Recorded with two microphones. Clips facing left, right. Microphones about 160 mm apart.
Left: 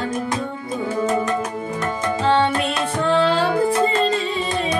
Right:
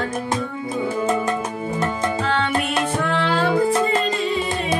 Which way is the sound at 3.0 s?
30° left (ahead or behind).